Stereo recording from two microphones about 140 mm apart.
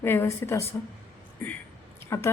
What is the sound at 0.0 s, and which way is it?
A woman's voice, 15° left (ahead or behind).